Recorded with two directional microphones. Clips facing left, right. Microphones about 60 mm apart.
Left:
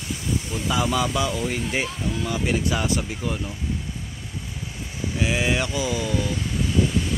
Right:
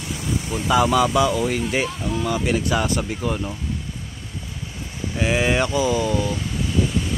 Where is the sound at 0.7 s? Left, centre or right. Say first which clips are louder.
Right 6 dB; right.